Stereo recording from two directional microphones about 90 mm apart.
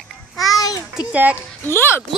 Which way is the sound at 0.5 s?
45° left (ahead or behind).